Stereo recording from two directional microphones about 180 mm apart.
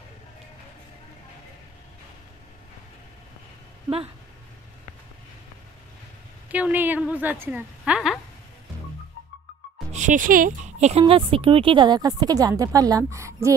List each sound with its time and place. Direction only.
6.5 s a woman's voice: 10° right (ahead or behind)
9.9 s speech: 45° right (ahead or behind); by 13.6 s 15° right (ahead or behind)